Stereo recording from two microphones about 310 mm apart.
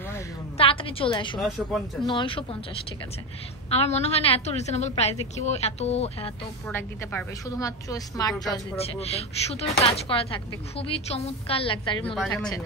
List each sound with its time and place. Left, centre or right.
0.1 s a sound: centre
2.0 s a woman's voice: centre
3.7 s a woman's voice: centre
6.7 s a woman's voice: centre